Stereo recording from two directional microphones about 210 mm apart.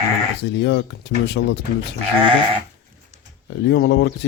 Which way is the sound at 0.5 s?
55° left (ahead or behind).